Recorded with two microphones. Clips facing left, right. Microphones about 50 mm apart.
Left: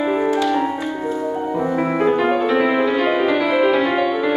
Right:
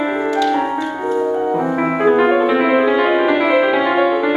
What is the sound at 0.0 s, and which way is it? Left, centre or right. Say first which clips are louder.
Music: right 1 dB; centre.